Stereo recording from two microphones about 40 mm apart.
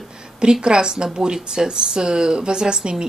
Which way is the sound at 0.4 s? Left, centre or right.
Right.